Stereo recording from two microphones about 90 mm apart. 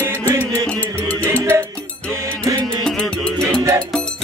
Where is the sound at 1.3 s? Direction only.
30° right (ahead or behind).